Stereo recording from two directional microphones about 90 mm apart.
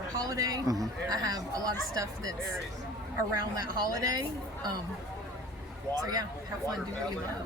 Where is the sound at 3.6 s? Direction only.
45° right (ahead or behind).